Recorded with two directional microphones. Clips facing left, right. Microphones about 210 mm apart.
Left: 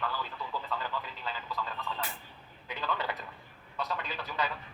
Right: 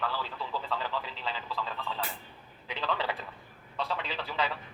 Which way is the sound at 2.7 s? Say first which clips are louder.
Right 2 dB; 30° right (ahead or behind).